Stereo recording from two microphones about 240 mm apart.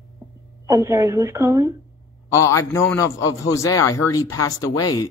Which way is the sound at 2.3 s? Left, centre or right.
Centre.